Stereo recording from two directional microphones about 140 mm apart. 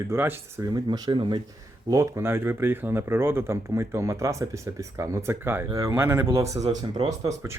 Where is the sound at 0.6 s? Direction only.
30° right (ahead or behind).